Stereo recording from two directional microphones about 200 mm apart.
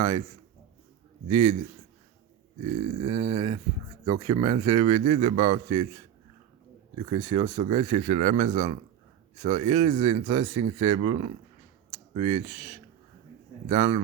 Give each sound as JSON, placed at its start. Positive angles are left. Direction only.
{"t": 1.3, "sound": "speech", "side_deg": -30}
{"t": 2.7, "sound": "a man's voice", "side_deg": -30}
{"t": 7.0, "sound": "speech", "side_deg": -30}
{"t": 13.7, "sound": "speech", "side_deg": -35}